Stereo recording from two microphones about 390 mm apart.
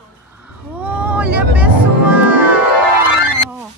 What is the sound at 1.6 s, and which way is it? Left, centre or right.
Music, centre.